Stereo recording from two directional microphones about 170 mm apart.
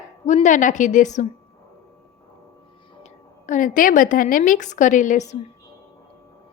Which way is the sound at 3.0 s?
45° left (ahead or behind).